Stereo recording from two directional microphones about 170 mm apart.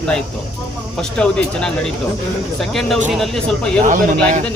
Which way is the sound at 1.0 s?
5° left (ahead or behind).